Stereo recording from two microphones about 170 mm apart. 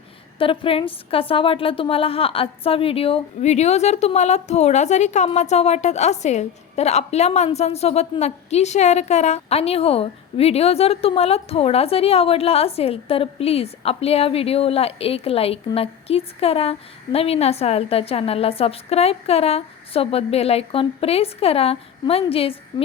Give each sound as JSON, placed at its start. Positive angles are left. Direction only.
{"t": 0.3, "sound": "a woman's voice", "side_deg": 30}